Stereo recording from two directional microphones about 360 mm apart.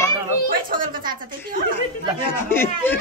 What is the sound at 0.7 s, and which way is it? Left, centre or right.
Speech, right.